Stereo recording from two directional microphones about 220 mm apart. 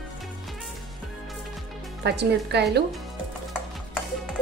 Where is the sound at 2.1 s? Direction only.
50° right (ahead or behind).